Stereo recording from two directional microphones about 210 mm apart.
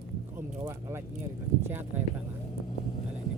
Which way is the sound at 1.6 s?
10° right (ahead or behind).